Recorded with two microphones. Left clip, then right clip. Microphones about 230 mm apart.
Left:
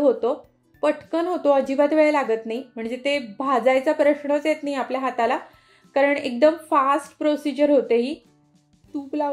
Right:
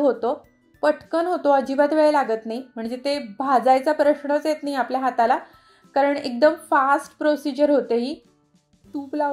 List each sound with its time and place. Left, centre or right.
0.0 s a woman's voice: right